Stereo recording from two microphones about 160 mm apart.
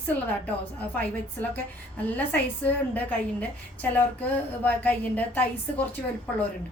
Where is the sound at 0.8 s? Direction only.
10° left (ahead or behind).